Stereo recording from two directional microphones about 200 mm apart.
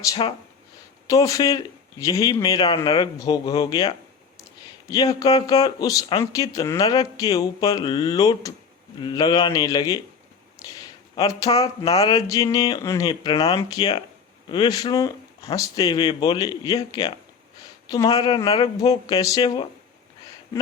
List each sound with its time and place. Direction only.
0.0 s speech: 20° left (ahead or behind)